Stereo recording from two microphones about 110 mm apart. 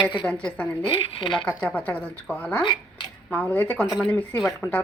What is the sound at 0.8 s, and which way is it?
Speech, 50° left (ahead or behind).